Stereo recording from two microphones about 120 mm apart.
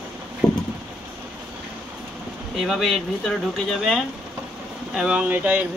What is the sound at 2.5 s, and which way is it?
Speech, centre (ahead or behind).